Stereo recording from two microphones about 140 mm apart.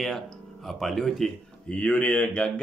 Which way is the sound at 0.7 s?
Centre (ahead or behind).